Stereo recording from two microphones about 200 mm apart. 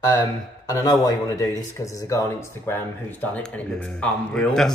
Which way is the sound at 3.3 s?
5° left (ahead or behind).